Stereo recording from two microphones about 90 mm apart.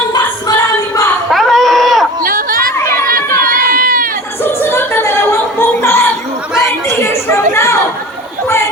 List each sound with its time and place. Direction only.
0.1 s music: 45° left (ahead or behind)
1.3 s sheep: centre (ahead or behind)
4.4 s music: 25° left (ahead or behind)
6.6 s chatter: 30° left (ahead or behind)